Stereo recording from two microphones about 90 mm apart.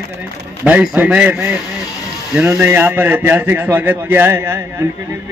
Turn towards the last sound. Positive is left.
turn(degrees=-30)  # may be behind; listen again after turning